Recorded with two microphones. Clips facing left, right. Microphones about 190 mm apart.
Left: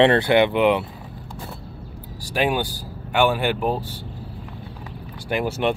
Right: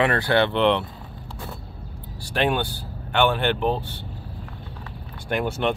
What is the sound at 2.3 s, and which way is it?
Speech, 10° left (ahead or behind).